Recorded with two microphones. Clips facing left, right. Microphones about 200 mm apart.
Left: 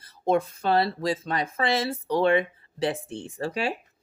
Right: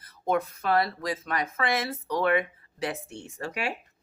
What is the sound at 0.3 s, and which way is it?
Speech, 30° left (ahead or behind).